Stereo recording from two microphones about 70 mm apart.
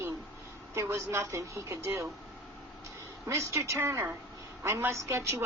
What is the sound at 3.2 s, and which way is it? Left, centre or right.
A woman's voice, right.